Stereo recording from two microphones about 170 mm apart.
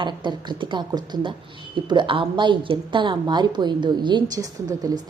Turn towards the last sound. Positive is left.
turn(degrees=-25)  # may be behind; listen again after turning